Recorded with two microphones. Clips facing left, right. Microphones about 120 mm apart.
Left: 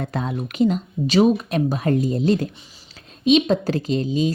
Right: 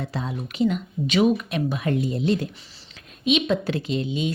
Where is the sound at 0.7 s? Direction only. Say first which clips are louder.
Left 4 dB; 35° left (ahead or behind).